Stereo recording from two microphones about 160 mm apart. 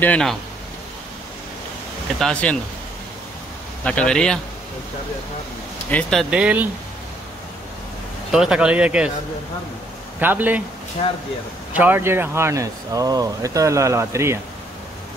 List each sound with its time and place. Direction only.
0.0 s a man's voice: 5° left (ahead or behind)
2.1 s a man's voice: 5° left (ahead or behind)
3.8 s a man's voice: 5° left (ahead or behind)
5.9 s speech: 5° left (ahead or behind)
6.3 s speech: 10° right (ahead or behind)
8.3 s speech: 5° right (ahead or behind)
10.2 s speech: 10° right (ahead or behind)
11.7 s speech: 10° right (ahead or behind)